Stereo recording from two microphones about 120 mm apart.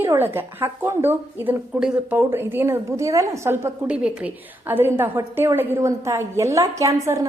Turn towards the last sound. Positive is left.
turn(degrees=-25)  # may be behind; listen again after turning